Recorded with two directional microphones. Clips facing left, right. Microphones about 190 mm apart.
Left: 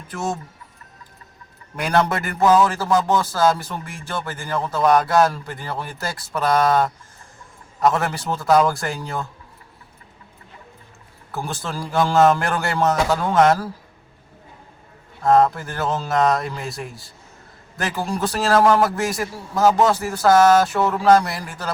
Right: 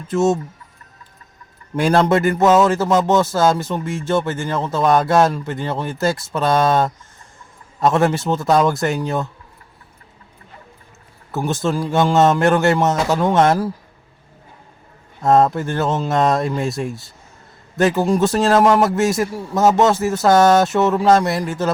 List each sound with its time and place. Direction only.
0.1 s speech: 25° right (ahead or behind)
1.7 s speech: 30° right (ahead or behind)
11.3 s speech: 20° right (ahead or behind)
15.2 s speech: 25° right (ahead or behind)